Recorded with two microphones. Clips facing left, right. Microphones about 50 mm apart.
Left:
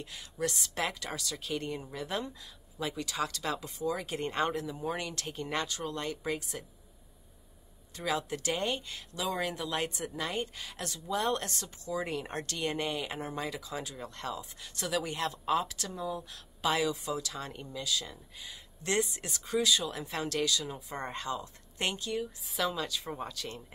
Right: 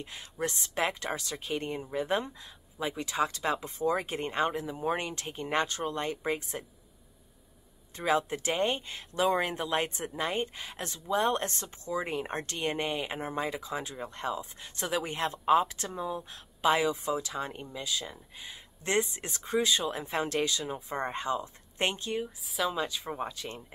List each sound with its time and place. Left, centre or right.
0.0 s speech: right
4.3 s speech: centre
4.7 s speech: right
7.9 s speech: right
22.4 s speech: centre
22.7 s speech: right